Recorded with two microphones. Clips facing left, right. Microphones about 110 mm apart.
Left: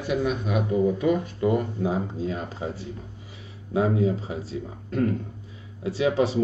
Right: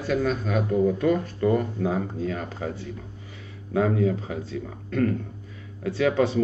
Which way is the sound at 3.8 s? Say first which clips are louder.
Even; 20° left (ahead or behind).